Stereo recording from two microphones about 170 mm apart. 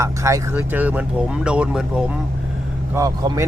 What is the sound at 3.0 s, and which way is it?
Speech, 25° right (ahead or behind).